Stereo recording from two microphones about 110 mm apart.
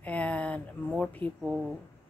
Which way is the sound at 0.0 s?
15° left (ahead or behind).